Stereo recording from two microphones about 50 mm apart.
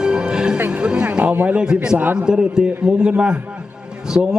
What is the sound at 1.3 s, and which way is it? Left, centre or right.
Speech, right.